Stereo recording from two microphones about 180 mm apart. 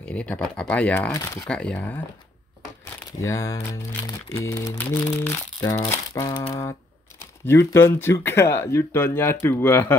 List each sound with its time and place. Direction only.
0.0 s speech: 5° left (ahead or behind)
1.1 s speech: 20° left (ahead or behind)
1.4 s speech: 5° left (ahead or behind)
3.1 s speech: 15° left (ahead or behind)